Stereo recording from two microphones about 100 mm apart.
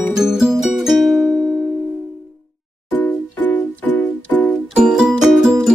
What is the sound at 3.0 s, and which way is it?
Music, 15° left (ahead or behind).